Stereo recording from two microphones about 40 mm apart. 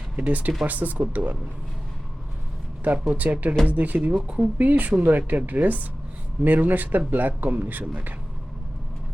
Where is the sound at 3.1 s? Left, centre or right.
Right.